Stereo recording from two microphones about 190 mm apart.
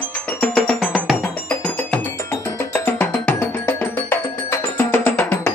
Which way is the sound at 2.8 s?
10° left (ahead or behind).